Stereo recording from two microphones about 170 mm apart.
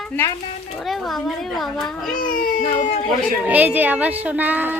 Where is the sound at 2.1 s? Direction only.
55° left (ahead or behind).